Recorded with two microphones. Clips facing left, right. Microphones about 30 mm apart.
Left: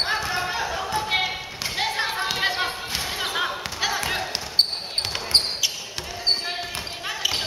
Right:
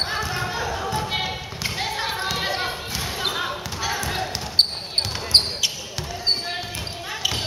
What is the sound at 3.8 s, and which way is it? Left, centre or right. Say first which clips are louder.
Basketball bounce: left 2 dB; left.